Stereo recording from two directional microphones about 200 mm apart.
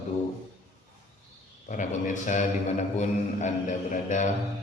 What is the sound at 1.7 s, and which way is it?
A man's voice, 40° left (ahead or behind).